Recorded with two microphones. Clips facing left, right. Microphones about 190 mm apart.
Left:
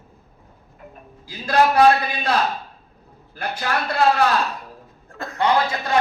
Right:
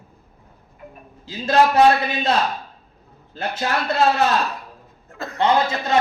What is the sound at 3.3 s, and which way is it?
Speech, 25° right (ahead or behind).